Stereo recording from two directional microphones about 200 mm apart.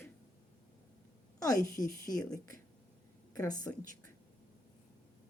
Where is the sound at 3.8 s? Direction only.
40° right (ahead or behind).